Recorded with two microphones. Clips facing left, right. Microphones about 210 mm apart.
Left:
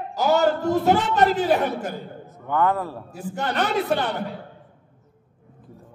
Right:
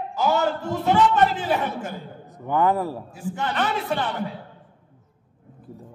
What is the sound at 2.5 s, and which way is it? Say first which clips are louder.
Speech: right 1 dB; 15° right (ahead or behind).